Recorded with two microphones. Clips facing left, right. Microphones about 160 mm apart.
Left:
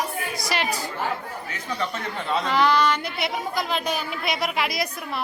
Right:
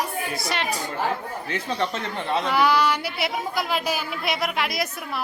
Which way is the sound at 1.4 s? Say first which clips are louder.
Right 4 dB; 30° right (ahead or behind).